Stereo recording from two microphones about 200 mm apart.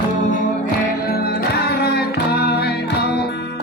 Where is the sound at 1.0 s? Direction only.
50° left (ahead or behind).